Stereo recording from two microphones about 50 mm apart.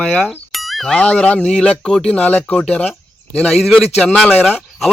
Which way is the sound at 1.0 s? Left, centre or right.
Left.